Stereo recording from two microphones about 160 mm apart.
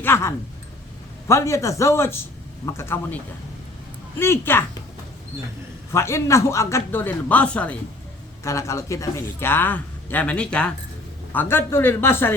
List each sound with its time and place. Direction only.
0.0 s a man's voice: 15° left (ahead or behind)
4.2 s a man's voice: 15° left (ahead or behind)
5.9 s a man's voice: 20° left (ahead or behind)
8.4 s a man's voice: 20° left (ahead or behind)